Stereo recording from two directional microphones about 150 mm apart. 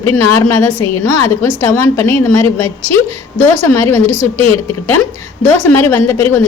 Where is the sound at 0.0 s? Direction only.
15° left (ahead or behind).